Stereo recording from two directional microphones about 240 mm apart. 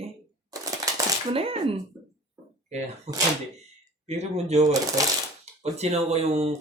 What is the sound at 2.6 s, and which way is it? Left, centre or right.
Speech, right.